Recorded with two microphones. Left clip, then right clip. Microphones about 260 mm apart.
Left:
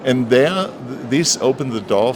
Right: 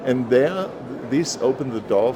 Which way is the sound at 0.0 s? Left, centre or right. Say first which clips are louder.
Left 4 dB; left.